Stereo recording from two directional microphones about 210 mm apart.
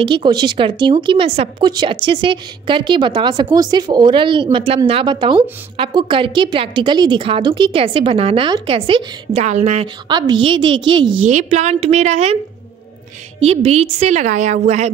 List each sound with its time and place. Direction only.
0.0 s speech: 20° right (ahead or behind)
13.4 s a woman's voice: 30° right (ahead or behind)